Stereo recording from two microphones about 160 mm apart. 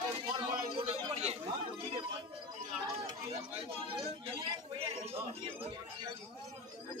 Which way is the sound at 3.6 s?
35° right (ahead or behind).